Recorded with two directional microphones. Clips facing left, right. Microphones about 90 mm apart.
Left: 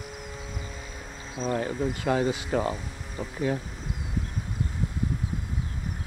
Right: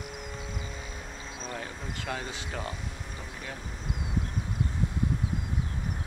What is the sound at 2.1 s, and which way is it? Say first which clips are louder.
Speech: left 11 dB; 25° left (ahead or behind).